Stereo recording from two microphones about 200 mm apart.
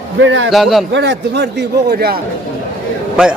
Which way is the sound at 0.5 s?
Centre (ahead or behind).